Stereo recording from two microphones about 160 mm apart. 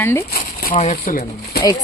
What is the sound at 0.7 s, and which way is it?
Speech, 50° left (ahead or behind).